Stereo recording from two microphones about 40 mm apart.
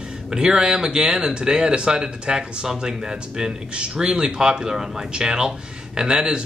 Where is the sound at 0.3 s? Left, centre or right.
Centre.